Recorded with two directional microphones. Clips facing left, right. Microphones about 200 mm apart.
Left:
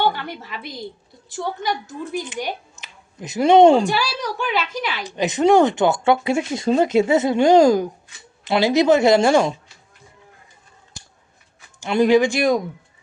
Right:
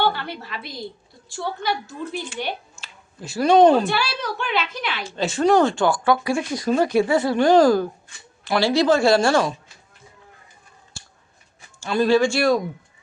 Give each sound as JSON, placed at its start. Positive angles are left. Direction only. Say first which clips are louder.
{"t": 0.0, "sound": "a woman's voice", "louder": "left 1 dB", "side_deg": 15}
{"t": 2.1, "sound": "speech", "louder": "left 3 dB", "side_deg": 15}
{"t": 3.8, "sound": "a woman's voice", "louder": "left 2 dB", "side_deg": 10}
{"t": 11.0, "sound": "a sound", "louder": "left 1 dB", "side_deg": 15}
{"t": 11.8, "sound": "a woman's voice", "louder": "left 2 dB", "side_deg": 20}